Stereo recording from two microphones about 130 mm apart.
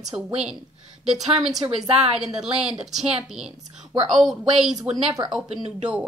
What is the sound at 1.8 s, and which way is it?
Speech, 50° right (ahead or behind).